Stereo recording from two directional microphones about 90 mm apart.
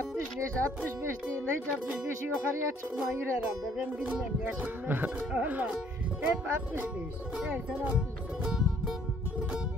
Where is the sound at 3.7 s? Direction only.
15° right (ahead or behind).